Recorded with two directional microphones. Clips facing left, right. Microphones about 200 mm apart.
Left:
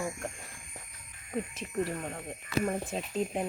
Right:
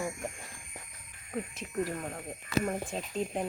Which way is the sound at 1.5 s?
Centre (ahead or behind).